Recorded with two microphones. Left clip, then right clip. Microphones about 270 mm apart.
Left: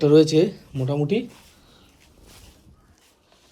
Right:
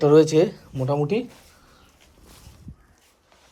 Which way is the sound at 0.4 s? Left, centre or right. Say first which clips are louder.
Right 1 dB; left.